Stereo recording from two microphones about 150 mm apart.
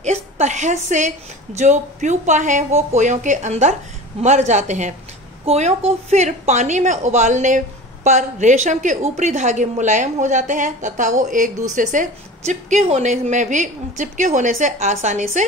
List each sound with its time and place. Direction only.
0.0 s a woman's voice: 50° right (ahead or behind)